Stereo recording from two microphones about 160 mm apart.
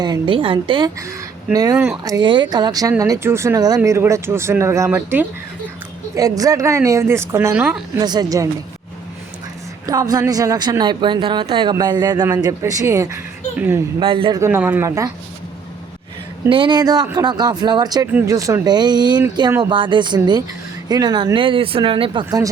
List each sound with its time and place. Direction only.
0.0 s speech: 30° right (ahead or behind)
2.0 s speech: 25° right (ahead or behind)
6.1 s speech: 20° right (ahead or behind)
7.9 s speech: 25° right (ahead or behind)
9.8 s speech: 20° right (ahead or behind)
14.0 s speech: 35° right (ahead or behind)
14.3 s speech: 15° right (ahead or behind)
16.5 s speech: 30° right (ahead or behind)